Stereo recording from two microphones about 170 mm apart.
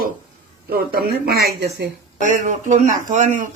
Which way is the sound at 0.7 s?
60° right (ahead or behind).